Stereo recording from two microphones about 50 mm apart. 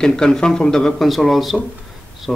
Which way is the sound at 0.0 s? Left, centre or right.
Centre.